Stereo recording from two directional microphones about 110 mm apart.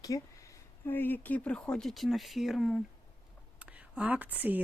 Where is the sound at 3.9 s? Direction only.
15° right (ahead or behind).